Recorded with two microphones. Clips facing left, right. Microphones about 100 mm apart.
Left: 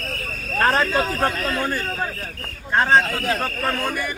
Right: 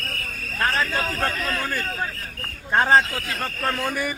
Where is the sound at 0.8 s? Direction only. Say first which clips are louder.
Left 4 dB; 20° left (ahead or behind).